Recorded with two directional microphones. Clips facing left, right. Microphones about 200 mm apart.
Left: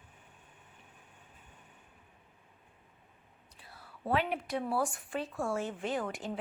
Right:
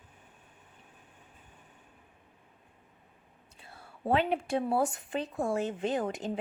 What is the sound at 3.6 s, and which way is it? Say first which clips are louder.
Speech: right 4 dB; 25° right (ahead or behind).